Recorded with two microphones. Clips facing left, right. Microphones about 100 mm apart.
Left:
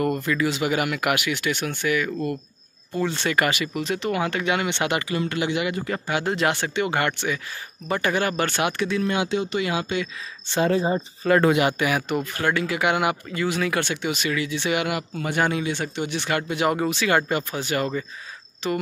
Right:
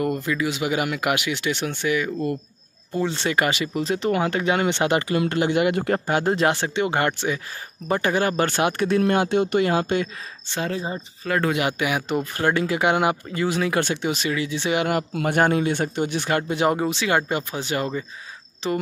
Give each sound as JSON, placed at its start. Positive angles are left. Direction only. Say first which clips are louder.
{"t": 0.0, "sound": "speech", "louder": "left 1 dB", "side_deg": -15}
{"t": 6.0, "sound": "speech", "louder": "right 1 dB", "side_deg": -40}
{"t": 9.7, "sound": "speech", "louder": "right 4 dB", "side_deg": -40}
{"t": 10.5, "sound": "speech", "louder": "left 6 dB", "side_deg": 25}
{"t": 12.1, "sound": "speech", "louder": "right 2 dB", "side_deg": -30}
{"t": 15.1, "sound": "speech", "louder": "right 4 dB", "side_deg": -50}